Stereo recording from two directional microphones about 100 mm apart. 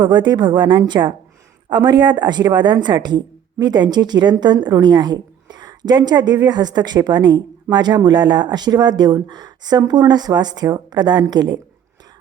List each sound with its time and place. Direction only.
0.0 s speech: 50° right (ahead or behind)